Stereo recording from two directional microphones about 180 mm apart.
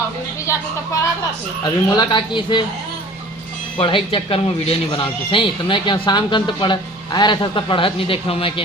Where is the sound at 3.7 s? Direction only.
30° left (ahead or behind).